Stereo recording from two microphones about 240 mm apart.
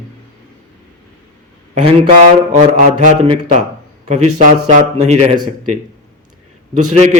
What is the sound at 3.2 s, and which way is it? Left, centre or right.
Speech, right.